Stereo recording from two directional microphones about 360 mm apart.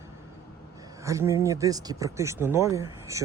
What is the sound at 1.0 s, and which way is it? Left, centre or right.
Speech, centre.